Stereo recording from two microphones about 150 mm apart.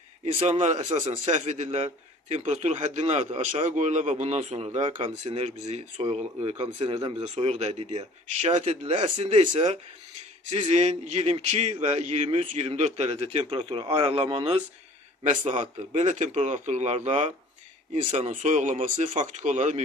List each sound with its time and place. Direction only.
0.3 s a man's voice: 40° right (ahead or behind)
1.3 s a man's voice: 50° right (ahead or behind); by 9.7 s 35° right (ahead or behind)
10.6 s a man's voice: 45° right (ahead or behind)
15.4 s a man's voice: 50° right (ahead or behind)